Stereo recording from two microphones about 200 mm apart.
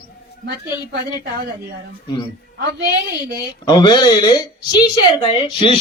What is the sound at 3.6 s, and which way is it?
A woman's voice, 20° left (ahead or behind).